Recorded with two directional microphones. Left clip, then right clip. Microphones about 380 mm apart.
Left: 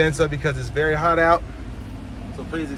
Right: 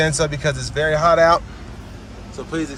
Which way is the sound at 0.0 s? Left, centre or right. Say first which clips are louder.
Right 1 dB; centre.